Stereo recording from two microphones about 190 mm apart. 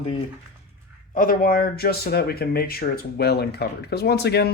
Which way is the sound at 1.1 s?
45° left (ahead or behind).